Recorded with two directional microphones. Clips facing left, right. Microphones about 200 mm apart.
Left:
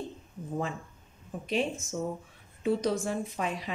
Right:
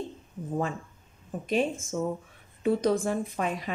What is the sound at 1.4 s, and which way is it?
Speech, 50° right (ahead or behind).